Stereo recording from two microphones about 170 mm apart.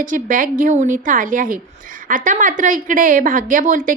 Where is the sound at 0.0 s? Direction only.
50° right (ahead or behind).